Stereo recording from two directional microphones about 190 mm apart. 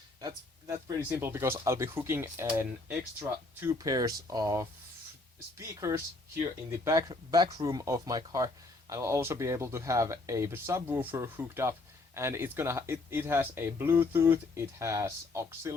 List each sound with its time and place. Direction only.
0.9 s speech: 15° right (ahead or behind)